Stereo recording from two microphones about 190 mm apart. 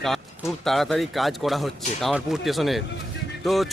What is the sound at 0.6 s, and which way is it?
Speech, centre (ahead or behind).